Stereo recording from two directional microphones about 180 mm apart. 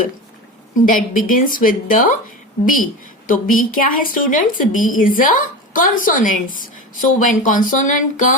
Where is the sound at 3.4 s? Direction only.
50° left (ahead or behind).